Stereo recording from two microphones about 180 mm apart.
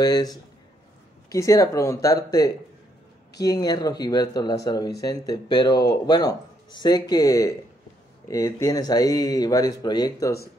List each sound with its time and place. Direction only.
0.0 s speech: 20° left (ahead or behind)